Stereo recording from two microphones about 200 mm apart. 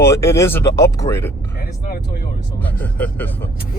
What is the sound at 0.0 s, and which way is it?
Speech, 15° left (ahead or behind).